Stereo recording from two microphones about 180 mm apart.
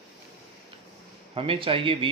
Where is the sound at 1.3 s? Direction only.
30° right (ahead or behind).